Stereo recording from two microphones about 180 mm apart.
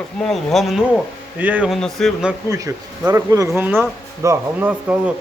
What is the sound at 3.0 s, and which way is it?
A man's voice, 15° right (ahead or behind).